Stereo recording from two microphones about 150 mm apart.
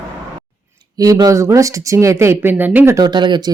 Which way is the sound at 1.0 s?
25° right (ahead or behind).